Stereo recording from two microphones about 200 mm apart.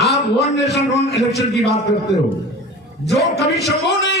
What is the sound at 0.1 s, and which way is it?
A man's voice, 60° left (ahead or behind).